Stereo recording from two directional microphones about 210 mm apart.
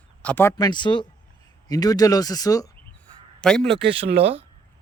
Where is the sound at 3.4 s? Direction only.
5° left (ahead or behind).